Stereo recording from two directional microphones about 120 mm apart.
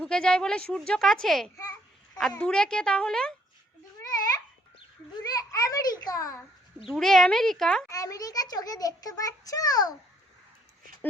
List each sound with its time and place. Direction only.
0.0 s a woman's voice: 5° left (ahead or behind)
4.0 s babbling: 30° left (ahead or behind)
5.2 s a child's voice: 30° left (ahead or behind)
6.7 s speech: centre (ahead or behind)
7.9 s a child's voice: 30° left (ahead or behind)